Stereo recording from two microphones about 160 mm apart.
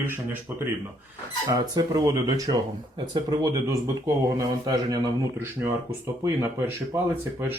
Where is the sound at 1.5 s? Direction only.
25° right (ahead or behind).